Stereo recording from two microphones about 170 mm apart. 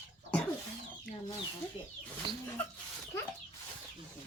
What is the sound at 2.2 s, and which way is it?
Bird, 25° right (ahead or behind).